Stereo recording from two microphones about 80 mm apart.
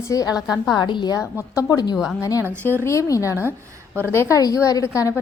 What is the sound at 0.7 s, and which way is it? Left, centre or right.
Speech, left.